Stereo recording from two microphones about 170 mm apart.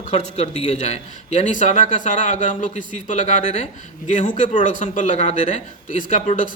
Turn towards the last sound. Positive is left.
turn(degrees=45)  # may be behind; listen again after turning